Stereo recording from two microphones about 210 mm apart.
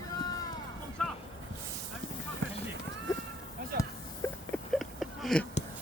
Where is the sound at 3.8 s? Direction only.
15° left (ahead or behind).